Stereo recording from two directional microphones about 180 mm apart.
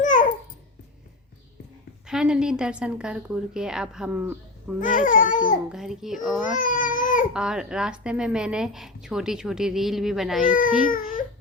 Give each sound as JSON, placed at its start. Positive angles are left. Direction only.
{"t": 0.0, "sound": "babbling", "side_deg": 45}
{"t": 2.0, "sound": "a woman's voice", "side_deg": -5}
{"t": 4.8, "sound": "speech", "side_deg": 45}
{"t": 5.6, "sound": "a woman's voice", "side_deg": -5}
{"t": 6.4, "sound": "speech", "side_deg": 50}
{"t": 7.3, "sound": "a woman's voice", "side_deg": -5}
{"t": 10.8, "sound": "speech", "side_deg": 50}